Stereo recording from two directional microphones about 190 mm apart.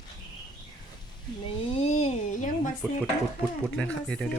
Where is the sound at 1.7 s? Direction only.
35° left (ahead or behind).